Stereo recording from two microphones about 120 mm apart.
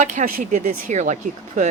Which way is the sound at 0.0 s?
90° right.